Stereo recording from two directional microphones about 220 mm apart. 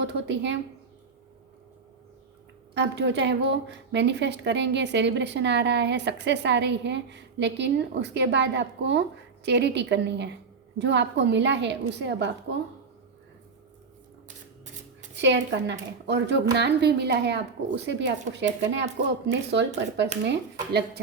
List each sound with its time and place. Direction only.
0.0 s a woman's voice: 55° right (ahead or behind)
2.7 s a woman's voice: 50° right (ahead or behind)
15.1 s a woman's voice: 55° right (ahead or behind)